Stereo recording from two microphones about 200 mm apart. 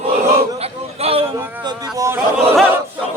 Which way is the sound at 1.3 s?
15° right (ahead or behind).